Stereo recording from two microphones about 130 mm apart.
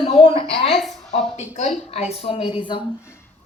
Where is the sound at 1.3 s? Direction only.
60° left (ahead or behind).